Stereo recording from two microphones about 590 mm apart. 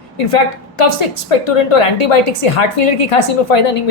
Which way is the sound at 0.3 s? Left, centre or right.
Left.